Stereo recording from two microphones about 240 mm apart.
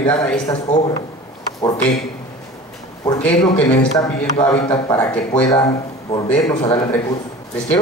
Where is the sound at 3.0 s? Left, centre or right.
Centre.